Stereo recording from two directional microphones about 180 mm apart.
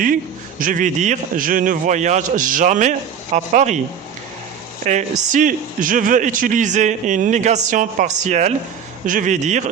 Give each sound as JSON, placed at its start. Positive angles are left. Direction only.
{"t": 0.6, "sound": "a man's voice", "side_deg": -45}
{"t": 4.9, "sound": "a man's voice", "side_deg": -45}